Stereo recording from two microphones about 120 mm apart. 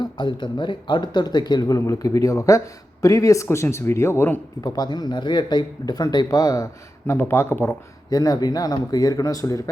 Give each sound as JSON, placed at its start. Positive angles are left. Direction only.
{"t": 0.0, "sound": "speech", "side_deg": 40}
{"t": 8.1, "sound": "speech", "side_deg": 35}